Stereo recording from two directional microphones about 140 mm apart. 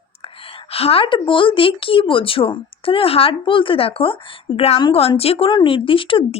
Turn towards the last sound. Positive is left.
turn(degrees=40)  # may be behind; listen again after turning